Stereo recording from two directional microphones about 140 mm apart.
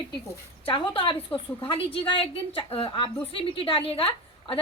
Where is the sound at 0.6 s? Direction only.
35° left (ahead or behind).